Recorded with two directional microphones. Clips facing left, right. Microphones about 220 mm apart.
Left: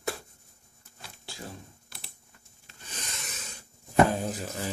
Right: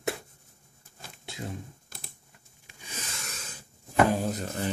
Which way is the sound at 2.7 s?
10° right (ahead or behind).